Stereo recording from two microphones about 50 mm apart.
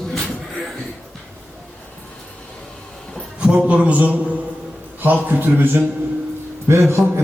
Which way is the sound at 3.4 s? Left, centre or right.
Right.